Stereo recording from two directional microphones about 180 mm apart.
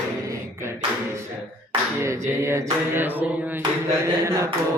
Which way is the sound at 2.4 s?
15° right (ahead or behind).